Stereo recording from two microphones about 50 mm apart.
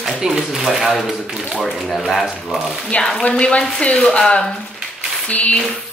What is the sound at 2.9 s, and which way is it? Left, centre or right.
A woman's voice, left.